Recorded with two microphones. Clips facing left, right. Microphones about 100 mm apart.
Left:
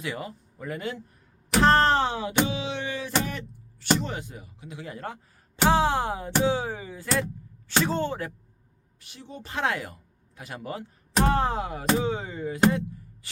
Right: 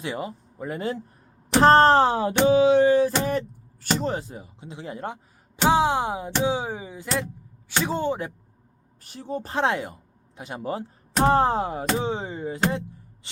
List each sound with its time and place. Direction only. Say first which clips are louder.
0.0 s a man's voice: right 3 dB; 25° right (ahead or behind)
9.0 s a man's voice: right 10 dB; 45° right (ahead or behind); by 12.5 s 25° right (ahead or behind)